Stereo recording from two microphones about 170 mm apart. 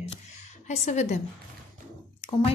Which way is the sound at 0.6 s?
45° left (ahead or behind).